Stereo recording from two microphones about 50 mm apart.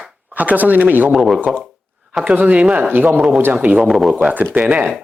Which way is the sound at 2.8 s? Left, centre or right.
Right.